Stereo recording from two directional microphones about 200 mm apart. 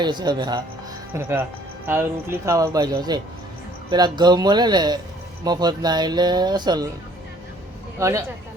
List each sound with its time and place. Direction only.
0.0 s speech: 20° right (ahead or behind)
7.9 s speech: 15° right (ahead or behind)